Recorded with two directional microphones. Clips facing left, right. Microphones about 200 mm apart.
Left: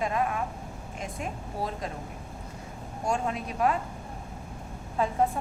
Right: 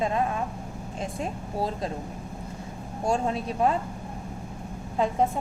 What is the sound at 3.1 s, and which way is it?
Speech, 30° right (ahead or behind).